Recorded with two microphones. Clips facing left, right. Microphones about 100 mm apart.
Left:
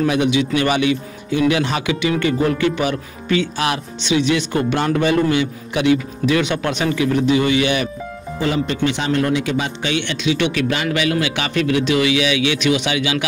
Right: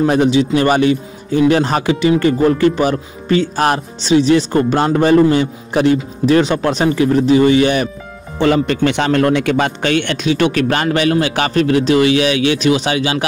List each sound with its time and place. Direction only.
0.0 s speech: 35° right (ahead or behind)
8.4 s speech: 70° right (ahead or behind); by 13.2 s 40° right (ahead or behind)